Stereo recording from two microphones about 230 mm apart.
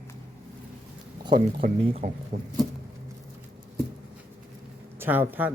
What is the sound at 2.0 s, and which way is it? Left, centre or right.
Speech, right.